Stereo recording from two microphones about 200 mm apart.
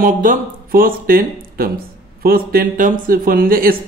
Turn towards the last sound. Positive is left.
turn(degrees=-45)  # may be behind; listen again after turning